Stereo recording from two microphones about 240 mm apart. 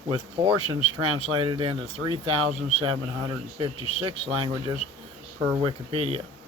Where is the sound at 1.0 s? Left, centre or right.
Right.